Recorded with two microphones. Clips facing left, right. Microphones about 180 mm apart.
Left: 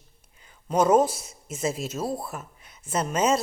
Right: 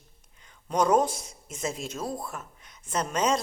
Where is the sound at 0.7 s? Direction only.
5° left (ahead or behind).